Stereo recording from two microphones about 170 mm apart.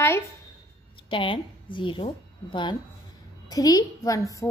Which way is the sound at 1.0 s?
30° left (ahead or behind).